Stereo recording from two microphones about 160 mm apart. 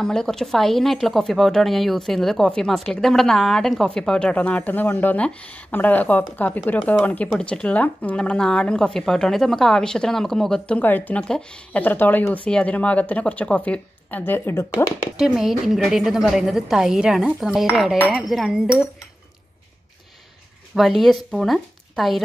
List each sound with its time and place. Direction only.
0.0 s a woman's voice: 5° left (ahead or behind); by 15.0 s 20° left (ahead or behind)
15.1 s a woman's voice: centre (ahead or behind)
20.7 s a woman's voice: centre (ahead or behind)